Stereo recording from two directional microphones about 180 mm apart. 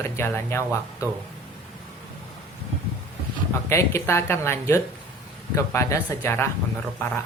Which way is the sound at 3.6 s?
15° left (ahead or behind).